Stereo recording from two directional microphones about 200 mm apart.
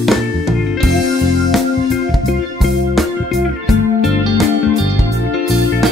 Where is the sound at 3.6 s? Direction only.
Centre (ahead or behind).